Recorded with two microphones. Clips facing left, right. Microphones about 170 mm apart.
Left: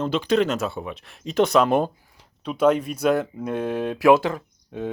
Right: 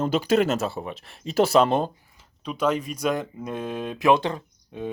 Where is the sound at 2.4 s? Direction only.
5° left (ahead or behind).